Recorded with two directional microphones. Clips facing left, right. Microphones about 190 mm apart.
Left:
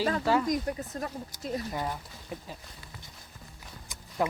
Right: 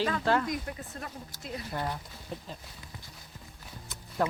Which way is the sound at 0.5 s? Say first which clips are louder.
Left 6 dB; 40° left (ahead or behind).